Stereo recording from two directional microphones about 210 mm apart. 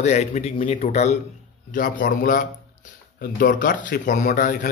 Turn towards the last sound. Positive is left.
turn(degrees=40)  # may be behind; listen again after turning